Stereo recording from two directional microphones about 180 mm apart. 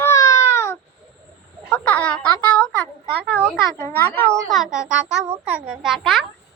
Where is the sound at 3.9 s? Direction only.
10° left (ahead or behind).